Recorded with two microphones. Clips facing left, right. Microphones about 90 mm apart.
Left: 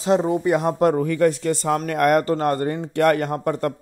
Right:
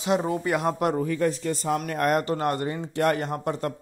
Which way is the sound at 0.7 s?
35° left (ahead or behind).